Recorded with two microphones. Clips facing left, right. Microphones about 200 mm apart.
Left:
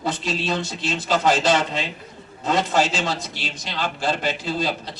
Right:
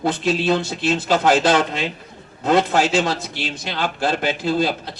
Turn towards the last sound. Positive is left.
turn(degrees=-55)  # may be behind; listen again after turning